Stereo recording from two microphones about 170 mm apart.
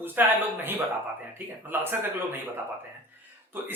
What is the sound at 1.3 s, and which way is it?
Speech, 10° right (ahead or behind).